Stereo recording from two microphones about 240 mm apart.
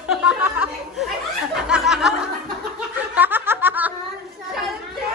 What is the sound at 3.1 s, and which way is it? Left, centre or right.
Snicker, centre.